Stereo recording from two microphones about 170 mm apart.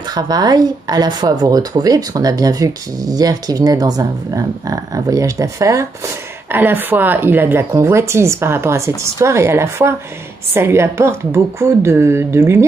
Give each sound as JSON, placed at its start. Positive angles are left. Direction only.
{"t": 0.0, "sound": "speech", "side_deg": -25}